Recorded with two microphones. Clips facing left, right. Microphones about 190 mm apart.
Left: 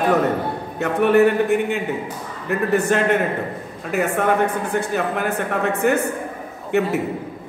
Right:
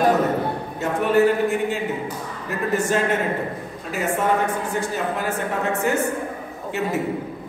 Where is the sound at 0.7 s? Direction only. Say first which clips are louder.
Left 4 dB; 65° left (ahead or behind).